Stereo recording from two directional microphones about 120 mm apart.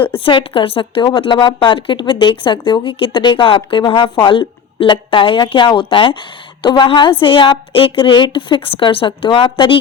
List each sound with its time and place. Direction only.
0.2 s a woman's voice: 45° left (ahead or behind)